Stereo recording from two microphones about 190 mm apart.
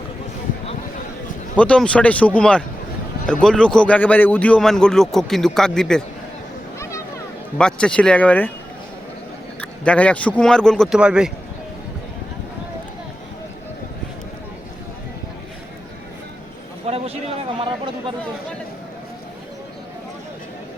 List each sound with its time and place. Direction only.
1.5 s a man's voice: 5° left (ahead or behind)
7.6 s a man's voice: 5° left (ahead or behind)
9.6 s a man's voice: 5° left (ahead or behind)
16.8 s vehicle: 30° right (ahead or behind)